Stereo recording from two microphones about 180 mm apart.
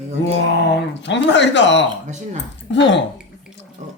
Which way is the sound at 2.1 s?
40° right (ahead or behind).